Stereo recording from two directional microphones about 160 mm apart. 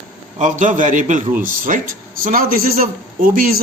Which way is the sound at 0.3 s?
50° right (ahead or behind).